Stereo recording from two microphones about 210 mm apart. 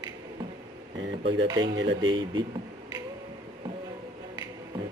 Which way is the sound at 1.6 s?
60° right (ahead or behind).